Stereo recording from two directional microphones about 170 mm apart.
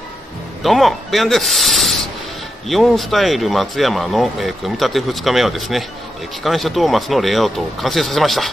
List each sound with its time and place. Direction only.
0.6 s speech: centre (ahead or behind)